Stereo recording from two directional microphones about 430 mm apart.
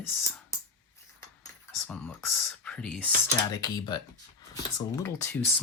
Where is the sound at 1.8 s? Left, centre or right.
Centre.